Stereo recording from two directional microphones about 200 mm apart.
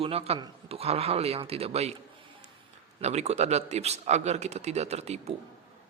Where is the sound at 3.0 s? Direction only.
35° right (ahead or behind).